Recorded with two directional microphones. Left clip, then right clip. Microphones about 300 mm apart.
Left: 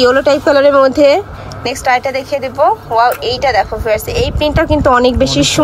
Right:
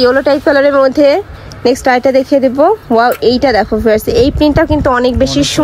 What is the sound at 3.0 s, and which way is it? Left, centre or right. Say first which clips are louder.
Speech: right 3 dB; right.